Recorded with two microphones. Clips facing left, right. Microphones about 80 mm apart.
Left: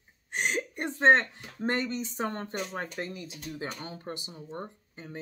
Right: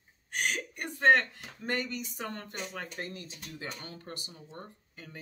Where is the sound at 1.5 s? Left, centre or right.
Left.